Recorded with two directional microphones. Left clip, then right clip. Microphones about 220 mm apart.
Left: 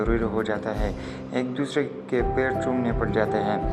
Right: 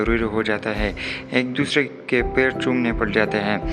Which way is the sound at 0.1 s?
30° right (ahead or behind).